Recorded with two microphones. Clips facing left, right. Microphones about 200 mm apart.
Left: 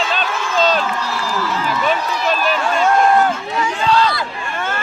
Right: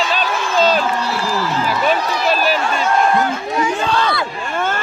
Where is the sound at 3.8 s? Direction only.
55° right (ahead or behind).